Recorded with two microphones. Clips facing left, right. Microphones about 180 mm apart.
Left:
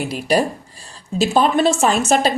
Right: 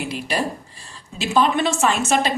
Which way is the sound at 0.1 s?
40° left (ahead or behind).